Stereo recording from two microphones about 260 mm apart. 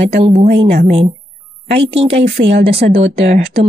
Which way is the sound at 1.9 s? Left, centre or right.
Right.